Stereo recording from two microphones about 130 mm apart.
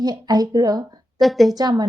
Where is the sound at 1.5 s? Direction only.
30° right (ahead or behind).